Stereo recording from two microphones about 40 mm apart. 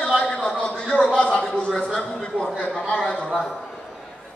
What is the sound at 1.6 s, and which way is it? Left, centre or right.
A man's voice, left.